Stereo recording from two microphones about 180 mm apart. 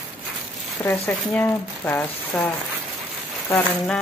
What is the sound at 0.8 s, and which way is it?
Speech, 10° left (ahead or behind).